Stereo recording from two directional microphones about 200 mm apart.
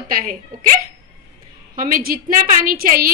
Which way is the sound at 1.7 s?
45° right (ahead or behind).